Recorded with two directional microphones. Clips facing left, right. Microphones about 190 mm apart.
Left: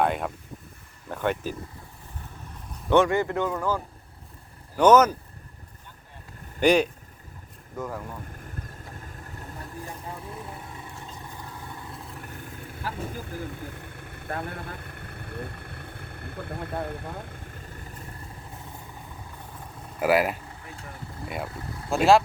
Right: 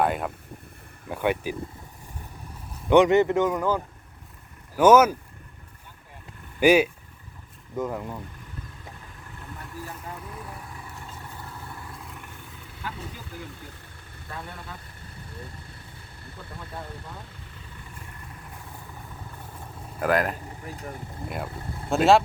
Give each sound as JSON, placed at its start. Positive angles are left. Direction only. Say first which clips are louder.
{"t": 0.0, "sound": "speech", "louder": "even", "side_deg": -5}
{"t": 2.9, "sound": "speech", "louder": "right 4 dB", "side_deg": -20}
{"t": 4.8, "sound": "speech", "louder": "right 1 dB", "side_deg": -10}
{"t": 6.6, "sound": "speech", "louder": "right 2 dB", "side_deg": -5}
{"t": 7.8, "sound": "speech", "louder": "right 4 dB", "side_deg": -20}
{"t": 9.6, "sound": "vehicle", "louder": "even", "side_deg": 30}
{"t": 12.8, "sound": "vehicle", "louder": "left 3 dB", "side_deg": 50}
{"t": 20.0, "sound": "speech", "louder": "left 2 dB", "side_deg": 5}